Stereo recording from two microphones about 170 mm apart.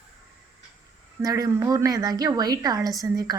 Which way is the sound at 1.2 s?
20° right (ahead or behind).